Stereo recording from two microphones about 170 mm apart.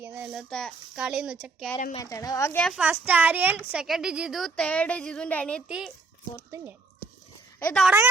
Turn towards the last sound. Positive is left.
turn(degrees=5)  # may be behind; listen again after turning